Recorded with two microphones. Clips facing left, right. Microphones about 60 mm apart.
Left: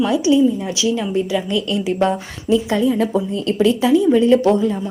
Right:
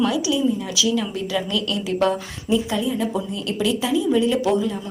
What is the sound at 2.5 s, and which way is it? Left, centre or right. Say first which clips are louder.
A woman's voice: left 5 dB; left.